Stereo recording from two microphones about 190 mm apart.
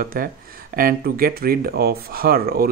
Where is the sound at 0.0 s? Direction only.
50° right (ahead or behind).